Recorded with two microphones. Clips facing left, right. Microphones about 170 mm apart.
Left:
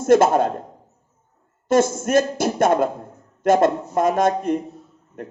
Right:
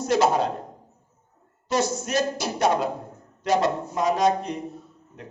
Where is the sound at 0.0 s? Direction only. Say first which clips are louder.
Left 6 dB; 50° left (ahead or behind).